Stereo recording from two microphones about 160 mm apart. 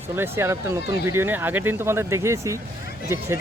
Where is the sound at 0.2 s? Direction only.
15° right (ahead or behind).